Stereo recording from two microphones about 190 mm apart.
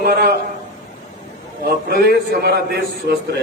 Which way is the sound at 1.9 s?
55° right (ahead or behind).